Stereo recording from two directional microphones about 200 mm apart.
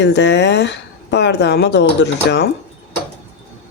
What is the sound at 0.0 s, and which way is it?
Speech, 60° left (ahead or behind).